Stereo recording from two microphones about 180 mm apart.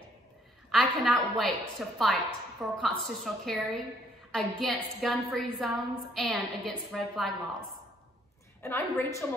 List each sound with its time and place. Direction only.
0.7 s a woman's voice: centre (ahead or behind)
8.6 s a woman's voice: 15° left (ahead or behind)